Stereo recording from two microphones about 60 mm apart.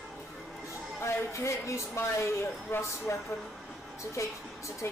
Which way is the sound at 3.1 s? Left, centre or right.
Left.